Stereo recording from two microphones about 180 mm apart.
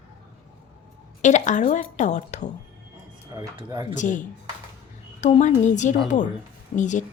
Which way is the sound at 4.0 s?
45° left (ahead or behind).